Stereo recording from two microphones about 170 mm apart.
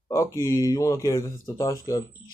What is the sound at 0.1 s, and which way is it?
Speech, 15° left (ahead or behind).